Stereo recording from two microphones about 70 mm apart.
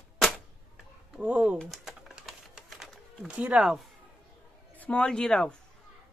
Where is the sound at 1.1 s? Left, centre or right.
Centre.